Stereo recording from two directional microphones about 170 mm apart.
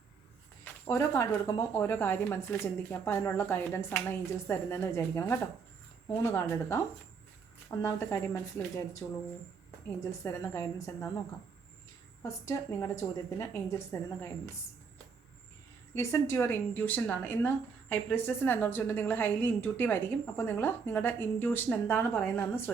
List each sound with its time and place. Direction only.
0.6 s speech: 15° left (ahead or behind)
7.8 s speech: 15° left (ahead or behind)
12.2 s speech: 15° left (ahead or behind)
16.0 s speech: 15° left (ahead or behind)